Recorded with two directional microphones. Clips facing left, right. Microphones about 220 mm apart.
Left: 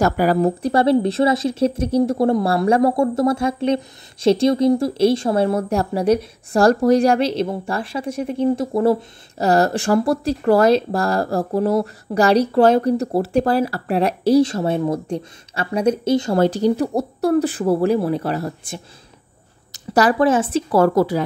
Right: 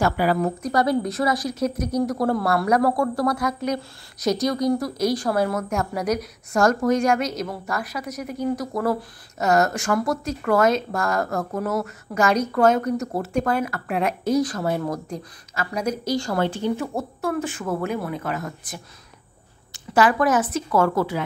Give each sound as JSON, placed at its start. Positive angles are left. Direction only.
{"t": 0.0, "sound": "a woman's voice", "side_deg": 40}
{"t": 16.3, "sound": "speech", "side_deg": 40}